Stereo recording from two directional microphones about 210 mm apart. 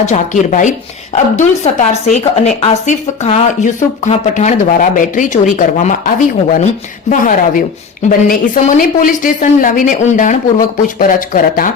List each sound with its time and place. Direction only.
0.0 s speech: 35° left (ahead or behind)